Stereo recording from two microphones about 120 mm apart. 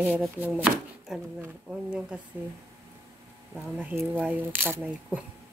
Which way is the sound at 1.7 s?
5° right (ahead or behind).